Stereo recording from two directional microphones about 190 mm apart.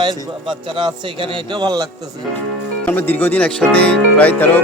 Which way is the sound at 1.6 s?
20° right (ahead or behind).